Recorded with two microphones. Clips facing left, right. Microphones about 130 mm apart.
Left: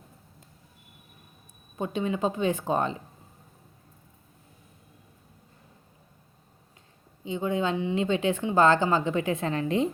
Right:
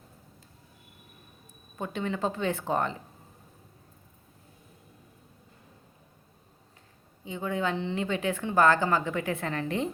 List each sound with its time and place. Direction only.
1.8 s speech: 20° left (ahead or behind)
7.3 s a woman's voice: 20° left (ahead or behind)